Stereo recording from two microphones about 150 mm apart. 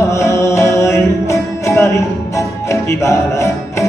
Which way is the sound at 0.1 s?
20° left (ahead or behind).